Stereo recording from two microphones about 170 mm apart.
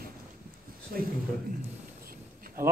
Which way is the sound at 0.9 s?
55° right (ahead or behind).